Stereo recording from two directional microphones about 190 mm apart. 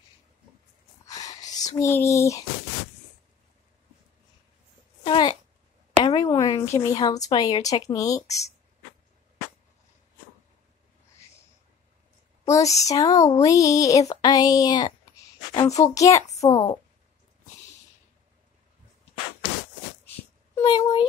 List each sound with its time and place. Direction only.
1.0 s whispering: 20° left (ahead or behind)
1.8 s speech: 15° left (ahead or behind)
5.0 s a sound: 25° left (ahead or behind)
7.2 s speech: 20° left (ahead or behind)
12.4 s speech: 15° left (ahead or behind)
15.8 s speech: 20° left (ahead or behind)
20.5 s speech: 25° left (ahead or behind)